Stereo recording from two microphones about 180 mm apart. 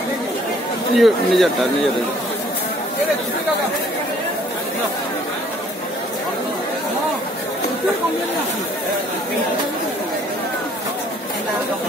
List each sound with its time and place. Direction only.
0.9 s speech: centre (ahead or behind)